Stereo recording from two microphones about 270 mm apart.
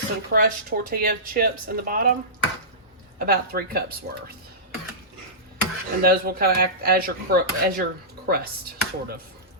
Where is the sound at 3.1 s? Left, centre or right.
Right.